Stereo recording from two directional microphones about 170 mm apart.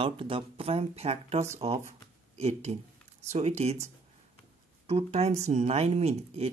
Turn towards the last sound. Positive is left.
turn(degrees=-35)  # may be behind; listen again after turning